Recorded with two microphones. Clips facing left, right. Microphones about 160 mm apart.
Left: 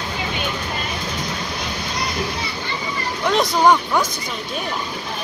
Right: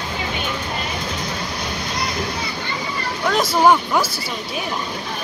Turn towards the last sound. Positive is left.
turn(degrees=-5)  # may be behind; listen again after turning